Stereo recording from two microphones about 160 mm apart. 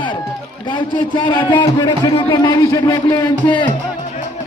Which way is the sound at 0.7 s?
30° left (ahead or behind).